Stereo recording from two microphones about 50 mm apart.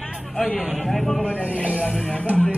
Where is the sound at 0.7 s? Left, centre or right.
Centre.